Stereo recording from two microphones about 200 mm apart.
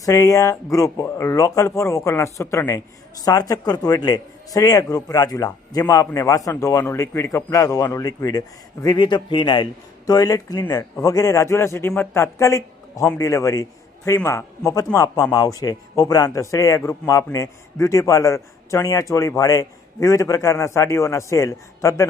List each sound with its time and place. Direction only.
0.0 s a man's voice: 15° left (ahead or behind)